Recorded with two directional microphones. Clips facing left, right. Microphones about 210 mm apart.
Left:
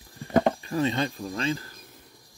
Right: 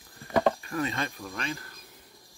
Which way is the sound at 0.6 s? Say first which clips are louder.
Left 5 dB; 30° left (ahead or behind).